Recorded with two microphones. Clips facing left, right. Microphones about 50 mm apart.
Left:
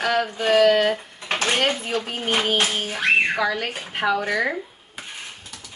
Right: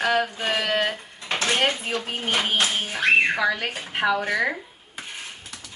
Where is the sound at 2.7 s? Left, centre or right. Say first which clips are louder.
Even; centre.